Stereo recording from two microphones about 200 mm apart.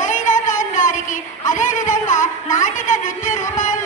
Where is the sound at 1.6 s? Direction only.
40° left (ahead or behind).